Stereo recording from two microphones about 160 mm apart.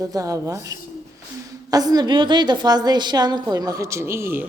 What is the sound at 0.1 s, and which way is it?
A woman's voice, 20° right (ahead or behind).